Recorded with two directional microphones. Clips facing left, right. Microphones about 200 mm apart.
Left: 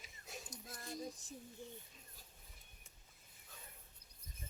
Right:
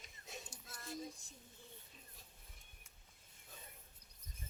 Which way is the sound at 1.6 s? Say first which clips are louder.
Left 7 dB; 15° left (ahead or behind).